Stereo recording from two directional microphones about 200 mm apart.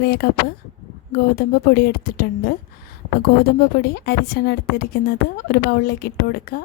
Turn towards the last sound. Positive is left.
turn(degrees=50)  # may be behind; listen again after turning